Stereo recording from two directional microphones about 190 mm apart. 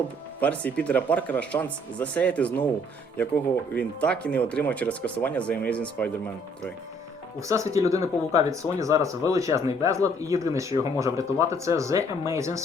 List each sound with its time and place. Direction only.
0.3 s speech: 5° left (ahead or behind)
3.8 s speech: 5° left (ahead or behind)
7.3 s speech: 15° right (ahead or behind)